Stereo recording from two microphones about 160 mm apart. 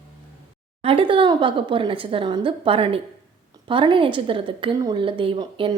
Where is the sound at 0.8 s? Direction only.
35° right (ahead or behind).